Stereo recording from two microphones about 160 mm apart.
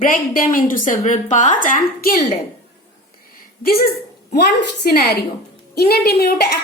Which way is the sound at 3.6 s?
70° left (ahead or behind).